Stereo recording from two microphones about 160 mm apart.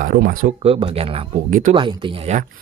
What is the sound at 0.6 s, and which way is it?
Speech, 35° right (ahead or behind).